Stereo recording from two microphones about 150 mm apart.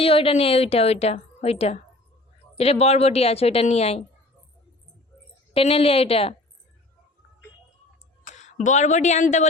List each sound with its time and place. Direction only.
0.0 s speech: 40° left (ahead or behind)
5.5 s speech: 40° left (ahead or behind)
8.3 s a woman's voice: 55° left (ahead or behind)